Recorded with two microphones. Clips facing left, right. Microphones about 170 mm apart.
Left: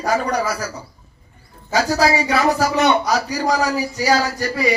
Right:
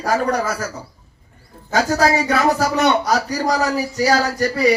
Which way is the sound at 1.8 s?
45° right (ahead or behind).